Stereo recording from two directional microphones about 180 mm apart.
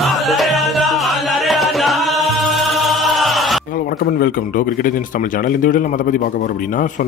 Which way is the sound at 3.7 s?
55° left (ahead or behind).